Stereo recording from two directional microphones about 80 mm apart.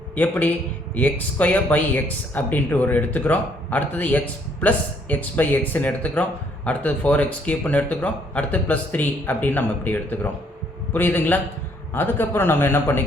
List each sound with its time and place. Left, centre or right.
0.2 s speech: centre